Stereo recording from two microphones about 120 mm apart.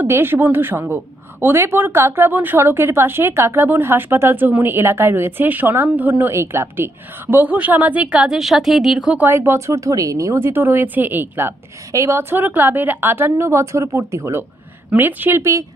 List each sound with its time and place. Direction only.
0.0 s a woman's voice: 20° right (ahead or behind)